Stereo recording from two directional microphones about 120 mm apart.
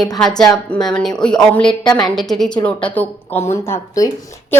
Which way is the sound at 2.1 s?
Centre (ahead or behind).